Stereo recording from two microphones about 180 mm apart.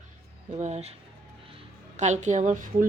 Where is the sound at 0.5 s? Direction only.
40° right (ahead or behind).